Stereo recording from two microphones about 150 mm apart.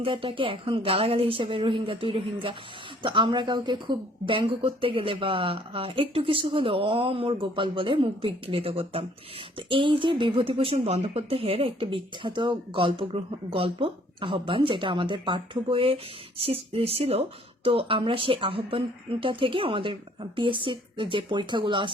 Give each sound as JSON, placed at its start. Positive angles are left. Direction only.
{"t": 0.0, "sound": "a woman's voice", "side_deg": -35}